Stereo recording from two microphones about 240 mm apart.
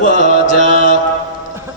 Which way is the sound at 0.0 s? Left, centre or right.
Left.